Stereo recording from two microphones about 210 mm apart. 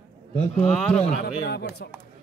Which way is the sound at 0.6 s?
5° left (ahead or behind).